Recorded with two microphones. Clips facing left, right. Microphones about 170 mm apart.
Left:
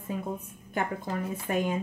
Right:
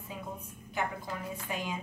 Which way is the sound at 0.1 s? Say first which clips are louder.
Left 6 dB; 45° left (ahead or behind).